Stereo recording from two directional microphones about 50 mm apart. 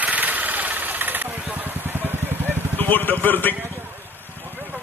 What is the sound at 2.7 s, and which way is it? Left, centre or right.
Speech, left.